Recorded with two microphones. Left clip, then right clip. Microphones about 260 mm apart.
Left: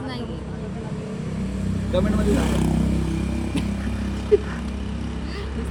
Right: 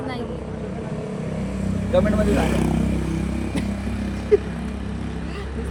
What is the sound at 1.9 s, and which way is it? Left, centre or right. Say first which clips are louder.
Speech: right 4 dB; centre.